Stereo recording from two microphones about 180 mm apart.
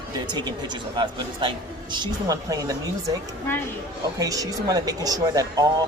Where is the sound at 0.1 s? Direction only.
25° right (ahead or behind).